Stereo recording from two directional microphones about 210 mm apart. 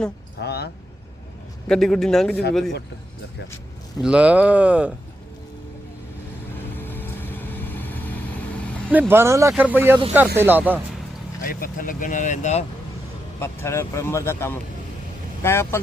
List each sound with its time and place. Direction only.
0.4 s a sound: 50° left (ahead or behind)
1.6 s speech: 5° left (ahead or behind)
4.0 s speech: 5° right (ahead or behind)
6.7 s vehicle: 10° left (ahead or behind)
8.9 s speech: 10° right (ahead or behind)
11.4 s speech: 40° left (ahead or behind)
13.4 s speech: 10° left (ahead or behind)